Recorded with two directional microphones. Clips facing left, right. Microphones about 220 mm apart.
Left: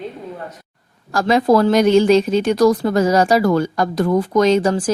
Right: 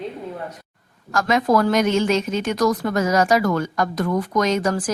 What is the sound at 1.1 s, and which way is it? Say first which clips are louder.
A woman's voice: left 4 dB; 35° left (ahead or behind).